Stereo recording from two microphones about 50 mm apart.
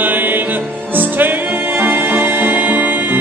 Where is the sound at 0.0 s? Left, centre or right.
Right.